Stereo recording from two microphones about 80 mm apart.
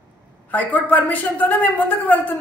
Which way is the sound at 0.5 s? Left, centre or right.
Left.